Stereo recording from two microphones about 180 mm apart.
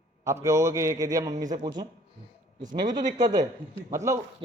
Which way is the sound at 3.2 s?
20° right (ahead or behind).